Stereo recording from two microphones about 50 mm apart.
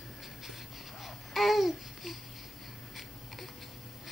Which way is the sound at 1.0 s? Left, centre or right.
Centre.